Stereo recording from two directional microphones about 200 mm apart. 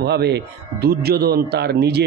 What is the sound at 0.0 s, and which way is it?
A man's voice, 55° right (ahead or behind).